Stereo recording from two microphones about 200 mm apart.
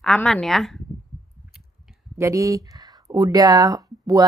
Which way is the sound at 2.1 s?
15° right (ahead or behind).